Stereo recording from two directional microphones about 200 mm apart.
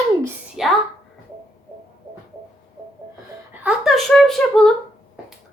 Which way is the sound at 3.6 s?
Centre (ahead or behind).